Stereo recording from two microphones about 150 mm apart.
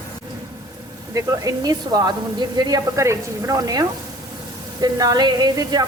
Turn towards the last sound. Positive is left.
turn(degrees=-25)  # may be behind; listen again after turning